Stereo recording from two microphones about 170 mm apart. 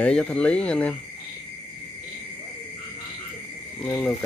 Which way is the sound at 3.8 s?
5° left (ahead or behind).